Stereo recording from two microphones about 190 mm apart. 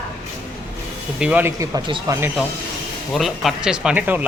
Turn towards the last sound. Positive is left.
turn(degrees=-10)  # may be behind; listen again after turning